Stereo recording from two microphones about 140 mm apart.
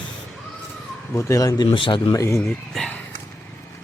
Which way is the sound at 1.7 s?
35° left (ahead or behind).